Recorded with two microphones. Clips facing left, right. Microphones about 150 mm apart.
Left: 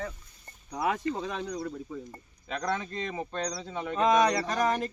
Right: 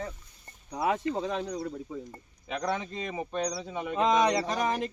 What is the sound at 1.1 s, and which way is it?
Speech, 20° right (ahead or behind).